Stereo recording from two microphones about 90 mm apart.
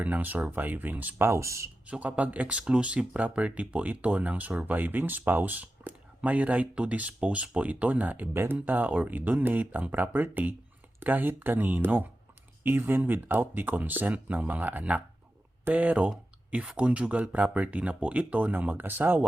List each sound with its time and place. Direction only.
0.0 s speech: 20° right (ahead or behind)
1.9 s speech: 15° right (ahead or behind)